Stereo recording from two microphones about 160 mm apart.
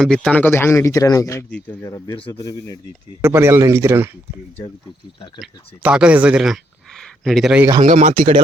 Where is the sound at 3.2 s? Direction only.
15° right (ahead or behind).